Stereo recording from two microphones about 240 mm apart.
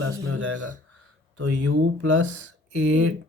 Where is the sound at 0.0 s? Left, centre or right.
Right.